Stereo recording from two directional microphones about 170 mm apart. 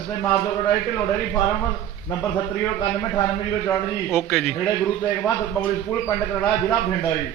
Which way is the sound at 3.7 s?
5° left (ahead or behind).